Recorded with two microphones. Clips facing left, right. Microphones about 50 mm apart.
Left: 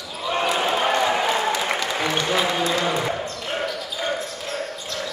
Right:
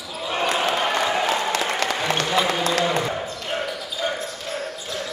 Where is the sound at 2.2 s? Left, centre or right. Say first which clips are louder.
Even; centre.